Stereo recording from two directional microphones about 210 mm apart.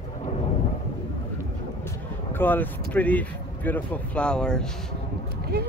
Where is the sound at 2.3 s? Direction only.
10° left (ahead or behind).